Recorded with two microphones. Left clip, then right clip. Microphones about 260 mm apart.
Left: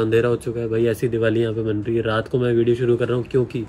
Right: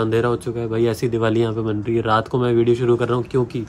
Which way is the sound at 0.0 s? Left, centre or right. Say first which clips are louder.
Left 1 dB; centre.